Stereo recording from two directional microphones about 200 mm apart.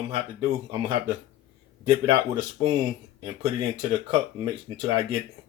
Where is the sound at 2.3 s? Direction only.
20° right (ahead or behind).